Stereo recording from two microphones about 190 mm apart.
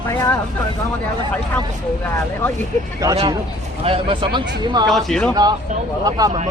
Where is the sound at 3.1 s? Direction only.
30° right (ahead or behind).